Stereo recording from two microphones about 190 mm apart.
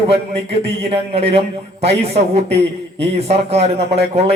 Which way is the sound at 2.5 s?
65° right (ahead or behind).